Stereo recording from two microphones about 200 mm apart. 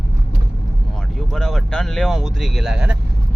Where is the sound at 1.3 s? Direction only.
5° left (ahead or behind).